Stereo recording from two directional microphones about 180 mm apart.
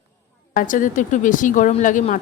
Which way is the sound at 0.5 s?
45° left (ahead or behind).